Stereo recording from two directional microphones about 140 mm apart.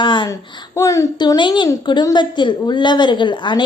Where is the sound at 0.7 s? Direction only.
20° left (ahead or behind).